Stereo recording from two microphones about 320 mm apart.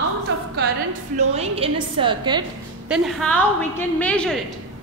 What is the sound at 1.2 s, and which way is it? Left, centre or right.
A woman's voice, centre.